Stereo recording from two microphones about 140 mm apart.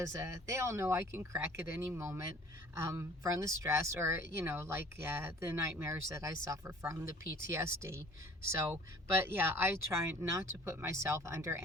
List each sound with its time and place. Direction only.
0.0 s speech: 20° right (ahead or behind)